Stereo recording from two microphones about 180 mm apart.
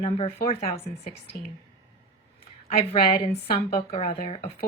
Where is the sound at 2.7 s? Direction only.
30° left (ahead or behind).